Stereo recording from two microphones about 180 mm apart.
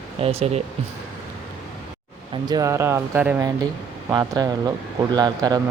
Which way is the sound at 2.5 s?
20° right (ahead or behind).